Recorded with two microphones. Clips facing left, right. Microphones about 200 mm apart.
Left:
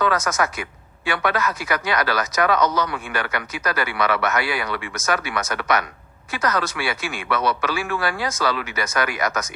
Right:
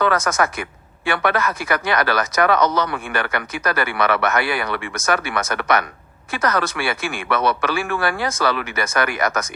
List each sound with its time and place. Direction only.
0.0 s speech: 55° right (ahead or behind)